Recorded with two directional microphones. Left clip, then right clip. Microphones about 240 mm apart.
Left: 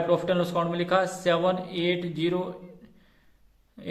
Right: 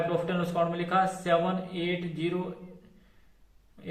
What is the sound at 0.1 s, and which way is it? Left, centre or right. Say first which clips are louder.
A man's voice: left 6 dB; left.